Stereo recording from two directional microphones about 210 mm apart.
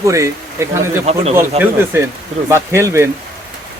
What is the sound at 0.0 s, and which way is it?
Speech, 15° right (ahead or behind).